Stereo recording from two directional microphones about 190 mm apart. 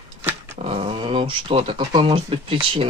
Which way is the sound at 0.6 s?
35° right (ahead or behind).